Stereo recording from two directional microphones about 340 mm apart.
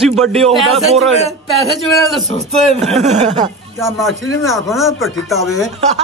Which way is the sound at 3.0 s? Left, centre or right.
Centre.